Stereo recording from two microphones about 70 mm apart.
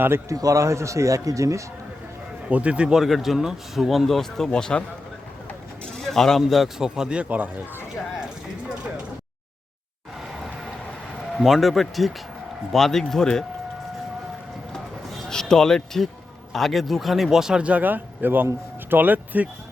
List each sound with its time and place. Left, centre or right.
0.3 s speech: right
2.5 s a man's voice: centre
3.0 s speech: centre
6.0 s a sound: centre
6.4 s a man's voice: centre; by 7.6 s right
11.3 s a man's voice: centre
15.3 s a man's voice: centre; by 19.5 s right